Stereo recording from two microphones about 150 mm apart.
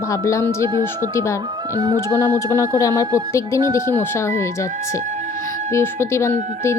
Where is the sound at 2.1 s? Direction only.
20° left (ahead or behind).